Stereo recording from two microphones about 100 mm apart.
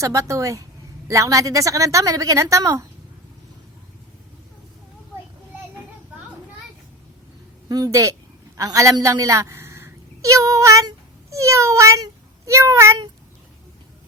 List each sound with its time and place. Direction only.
0.0 s a woman's voice: 35° right (ahead or behind)
7.7 s a woman's voice: 35° right (ahead or behind)